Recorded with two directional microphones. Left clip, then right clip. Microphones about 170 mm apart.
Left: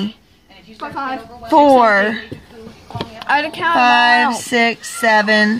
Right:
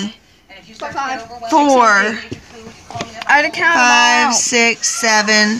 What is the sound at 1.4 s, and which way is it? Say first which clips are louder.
Speech: left 1 dB; 40° left (ahead or behind).